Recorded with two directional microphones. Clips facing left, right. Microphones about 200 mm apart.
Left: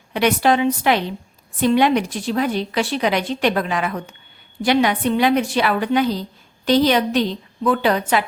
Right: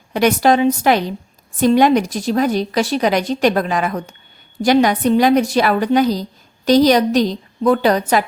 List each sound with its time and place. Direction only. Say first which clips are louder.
0.1 s a woman's voice: right 3 dB; 40° right (ahead or behind)